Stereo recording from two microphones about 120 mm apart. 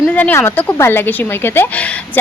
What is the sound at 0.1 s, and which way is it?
Speech, 15° left (ahead or behind).